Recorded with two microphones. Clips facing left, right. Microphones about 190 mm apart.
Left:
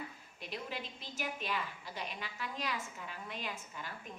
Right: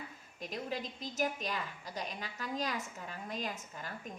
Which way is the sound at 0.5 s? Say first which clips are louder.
Right 3 dB; 40° right (ahead or behind).